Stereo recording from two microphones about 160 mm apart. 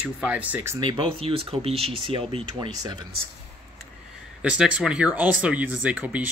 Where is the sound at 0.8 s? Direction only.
30° right (ahead or behind).